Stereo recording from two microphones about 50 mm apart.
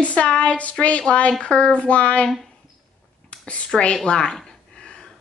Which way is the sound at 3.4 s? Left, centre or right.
Left.